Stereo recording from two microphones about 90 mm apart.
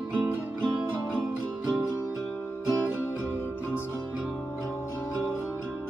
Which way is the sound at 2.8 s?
20° right (ahead or behind).